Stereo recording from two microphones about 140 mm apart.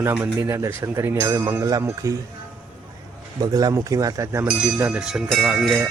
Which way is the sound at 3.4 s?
25° right (ahead or behind).